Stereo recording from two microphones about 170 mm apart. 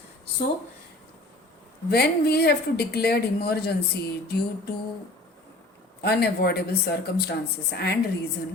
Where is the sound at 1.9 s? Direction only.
70° left (ahead or behind).